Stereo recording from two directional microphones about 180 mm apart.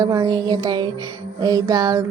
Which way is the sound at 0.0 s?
20° right (ahead or behind).